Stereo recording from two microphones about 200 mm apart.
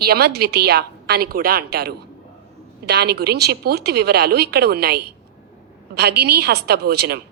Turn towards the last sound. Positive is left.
turn(degrees=-50)  # may be behind; listen again after turning